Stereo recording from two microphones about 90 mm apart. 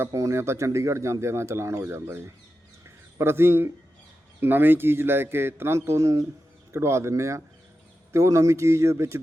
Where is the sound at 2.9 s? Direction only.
30° right (ahead or behind).